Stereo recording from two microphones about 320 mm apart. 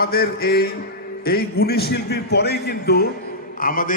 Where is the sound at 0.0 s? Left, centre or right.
Left.